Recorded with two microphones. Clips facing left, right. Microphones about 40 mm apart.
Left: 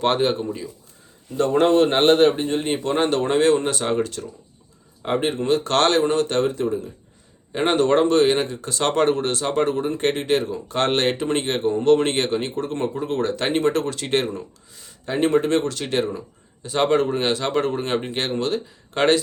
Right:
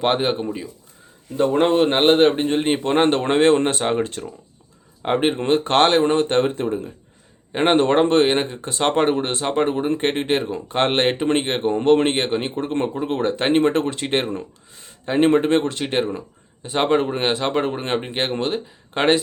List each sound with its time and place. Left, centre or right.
0.0 s a man's voice: centre; by 12.0 s right
12.0 s speech: right
14.3 s speech: right